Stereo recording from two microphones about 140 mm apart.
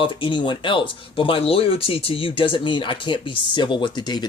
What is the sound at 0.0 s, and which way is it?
Speech, 35° left (ahead or behind).